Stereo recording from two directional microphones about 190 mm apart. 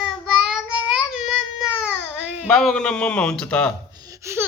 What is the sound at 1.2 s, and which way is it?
Baby cry, 5° right (ahead or behind).